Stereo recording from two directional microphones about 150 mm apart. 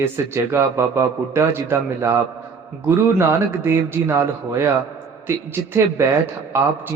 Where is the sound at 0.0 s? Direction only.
15° right (ahead or behind).